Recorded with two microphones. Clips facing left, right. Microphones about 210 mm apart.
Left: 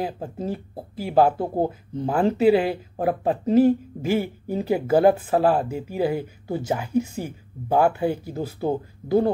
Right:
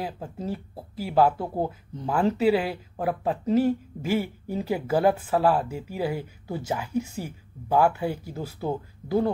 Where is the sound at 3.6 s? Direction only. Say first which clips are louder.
Left 8 dB; 20° left (ahead or behind).